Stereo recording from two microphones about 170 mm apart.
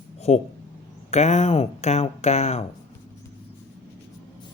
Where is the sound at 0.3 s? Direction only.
40° left (ahead or behind).